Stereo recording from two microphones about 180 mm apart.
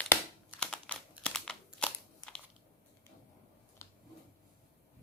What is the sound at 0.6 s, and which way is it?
Computer keyboard, 5° left (ahead or behind).